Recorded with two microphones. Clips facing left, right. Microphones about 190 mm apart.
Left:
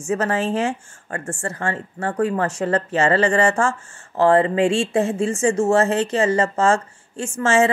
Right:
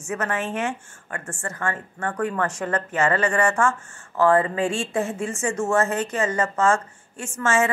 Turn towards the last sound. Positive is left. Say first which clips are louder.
# left 5 dB
turn(degrees=30)  # may be behind; listen again after turning